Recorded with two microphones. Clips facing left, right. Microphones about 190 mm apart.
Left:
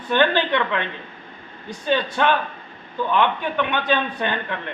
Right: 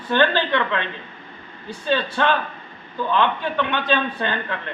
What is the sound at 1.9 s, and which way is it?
A man's voice, 15° left (ahead or behind).